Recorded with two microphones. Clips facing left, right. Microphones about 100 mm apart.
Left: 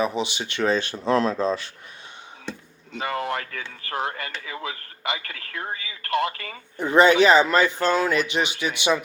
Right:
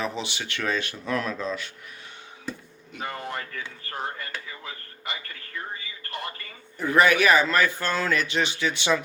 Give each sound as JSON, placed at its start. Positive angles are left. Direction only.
{"t": 0.0, "sound": "speech", "side_deg": 15}
{"t": 3.0, "sound": "speech", "side_deg": 90}
{"t": 6.7, "sound": "speech", "side_deg": 25}